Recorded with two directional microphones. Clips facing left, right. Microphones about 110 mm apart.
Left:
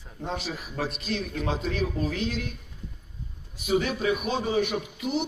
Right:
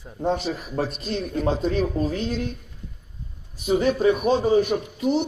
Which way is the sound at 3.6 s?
35° right (ahead or behind).